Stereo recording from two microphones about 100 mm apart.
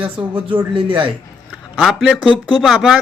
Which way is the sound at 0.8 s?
60° right (ahead or behind).